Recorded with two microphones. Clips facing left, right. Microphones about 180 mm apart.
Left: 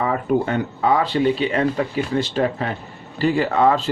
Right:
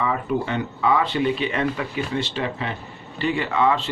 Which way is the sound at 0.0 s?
45° left (ahead or behind).